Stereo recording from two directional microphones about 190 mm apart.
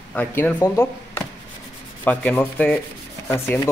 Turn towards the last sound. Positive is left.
turn(degrees=15)  # may be behind; listen again after turning